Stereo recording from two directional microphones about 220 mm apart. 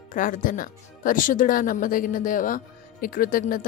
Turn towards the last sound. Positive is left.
turn(degrees=40)  # may be behind; listen again after turning